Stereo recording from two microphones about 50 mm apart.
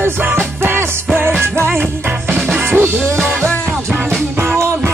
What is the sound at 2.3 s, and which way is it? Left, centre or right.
Music, centre.